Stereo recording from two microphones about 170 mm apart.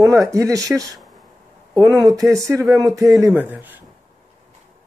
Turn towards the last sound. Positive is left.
turn(degrees=-10)  # may be behind; listen again after turning